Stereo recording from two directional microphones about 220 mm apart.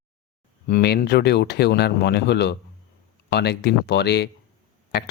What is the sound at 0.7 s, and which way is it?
Speech, 45° left (ahead or behind).